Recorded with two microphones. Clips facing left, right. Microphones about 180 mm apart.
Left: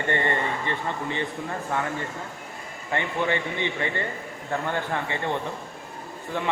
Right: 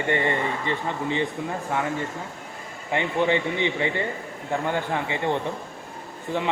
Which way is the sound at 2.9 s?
15° right (ahead or behind).